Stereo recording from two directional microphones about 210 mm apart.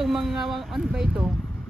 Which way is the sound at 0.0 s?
Centre (ahead or behind).